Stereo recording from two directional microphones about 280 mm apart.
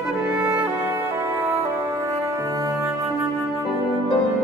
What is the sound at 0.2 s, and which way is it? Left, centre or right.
Music, centre.